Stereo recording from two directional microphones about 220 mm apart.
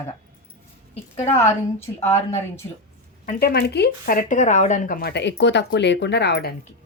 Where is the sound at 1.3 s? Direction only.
10° left (ahead or behind).